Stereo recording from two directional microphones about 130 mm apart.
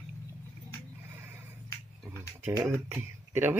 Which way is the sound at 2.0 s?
20° right (ahead or behind).